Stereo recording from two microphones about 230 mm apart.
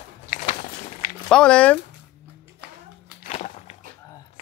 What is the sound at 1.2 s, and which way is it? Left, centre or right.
Speech, centre.